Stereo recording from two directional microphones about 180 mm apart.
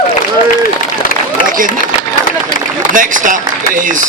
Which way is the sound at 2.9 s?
45° right (ahead or behind).